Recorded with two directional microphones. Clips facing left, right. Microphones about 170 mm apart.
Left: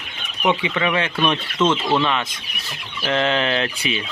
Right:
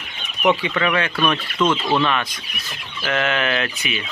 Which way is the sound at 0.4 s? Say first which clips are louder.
Right 1 dB; 15° left (ahead or behind).